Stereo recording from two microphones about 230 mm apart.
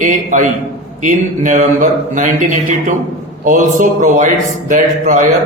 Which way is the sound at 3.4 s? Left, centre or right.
Right.